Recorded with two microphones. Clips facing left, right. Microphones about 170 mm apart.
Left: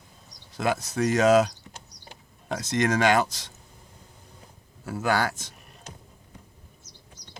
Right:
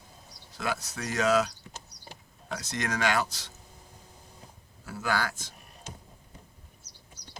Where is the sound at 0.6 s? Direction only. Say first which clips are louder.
Left 8 dB; 20° left (ahead or behind).